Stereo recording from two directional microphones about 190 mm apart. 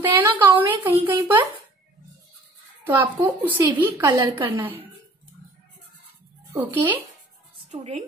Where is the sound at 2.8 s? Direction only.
10° right (ahead or behind).